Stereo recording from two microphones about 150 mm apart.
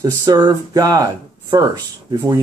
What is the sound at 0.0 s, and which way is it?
Speech, 25° right (ahead or behind).